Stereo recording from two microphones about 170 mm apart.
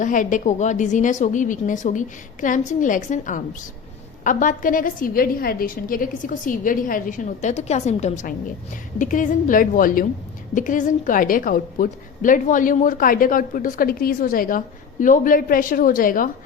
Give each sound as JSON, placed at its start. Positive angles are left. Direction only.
{"t": 0.0, "sound": "a woman's voice", "side_deg": 50}